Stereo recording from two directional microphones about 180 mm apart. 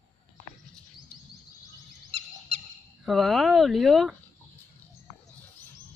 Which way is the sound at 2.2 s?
35° right (ahead or behind).